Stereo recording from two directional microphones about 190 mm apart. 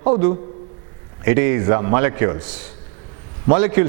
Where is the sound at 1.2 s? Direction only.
15° right (ahead or behind).